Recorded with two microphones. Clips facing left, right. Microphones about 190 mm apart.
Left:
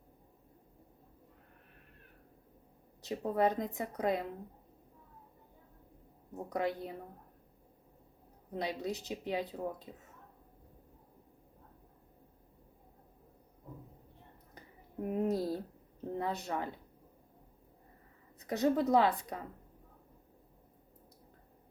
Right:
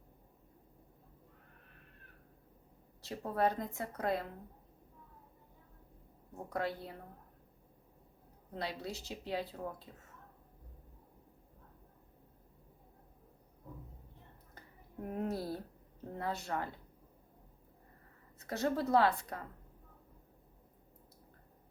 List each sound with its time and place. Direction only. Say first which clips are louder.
3.0 s a woman's voice: left 3 dB; 20° left (ahead or behind)
6.3 s a woman's voice: left 3 dB; 15° left (ahead or behind)
8.5 s a woman's voice: left 4 dB; 15° left (ahead or behind)
15.0 s a woman's voice: left 5 dB; 15° left (ahead or behind)
18.3 s a woman's voice: left 4 dB; 15° left (ahead or behind)